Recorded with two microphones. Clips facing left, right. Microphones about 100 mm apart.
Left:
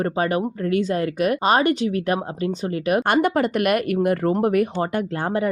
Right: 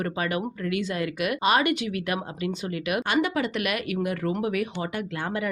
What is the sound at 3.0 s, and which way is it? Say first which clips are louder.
Speech: left 4 dB; 50° left (ahead or behind).